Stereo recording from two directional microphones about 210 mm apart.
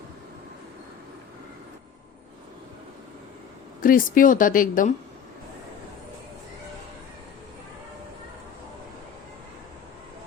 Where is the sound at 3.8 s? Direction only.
40° left (ahead or behind).